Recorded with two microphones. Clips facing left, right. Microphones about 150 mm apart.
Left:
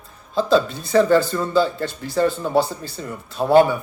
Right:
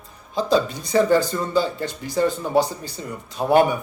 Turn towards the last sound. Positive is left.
turn(degrees=-15)  # may be behind; listen again after turning